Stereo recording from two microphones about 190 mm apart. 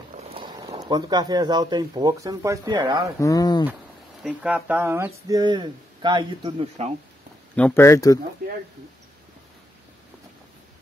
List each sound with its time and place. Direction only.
0.3 s a sound: 25° right (ahead or behind)
0.8 s speech: 20° right (ahead or behind)
3.2 s speech: 20° left (ahead or behind)
4.2 s speech: 5° right (ahead or behind); by 6.9 s 30° right (ahead or behind)
7.5 s speech: 10° left (ahead or behind)